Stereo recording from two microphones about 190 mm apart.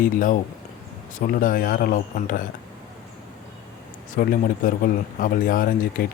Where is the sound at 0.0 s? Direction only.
45° left (ahead or behind).